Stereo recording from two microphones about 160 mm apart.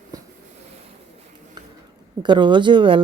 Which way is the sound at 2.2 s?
30° right (ahead or behind).